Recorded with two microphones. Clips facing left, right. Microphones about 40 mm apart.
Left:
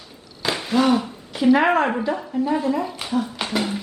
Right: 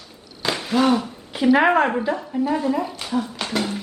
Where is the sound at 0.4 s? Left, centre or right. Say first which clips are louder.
Even; centre.